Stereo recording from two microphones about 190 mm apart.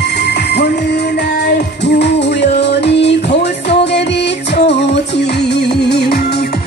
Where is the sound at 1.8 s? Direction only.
65° left (ahead or behind).